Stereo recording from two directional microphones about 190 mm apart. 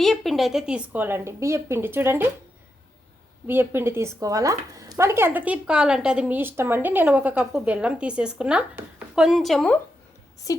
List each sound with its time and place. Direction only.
0.0 s speech: centre (ahead or behind)
3.4 s speech: 10° right (ahead or behind)
10.5 s a woman's voice: 15° left (ahead or behind)